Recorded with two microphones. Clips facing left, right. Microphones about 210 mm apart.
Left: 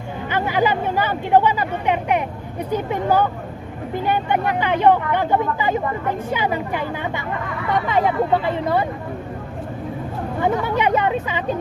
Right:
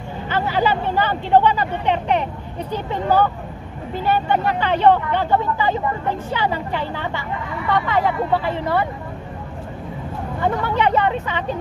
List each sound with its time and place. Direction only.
0.3 s a sound: 15° left (ahead or behind)
2.7 s speech: 10° left (ahead or behind)
10.4 s speech: 15° left (ahead or behind)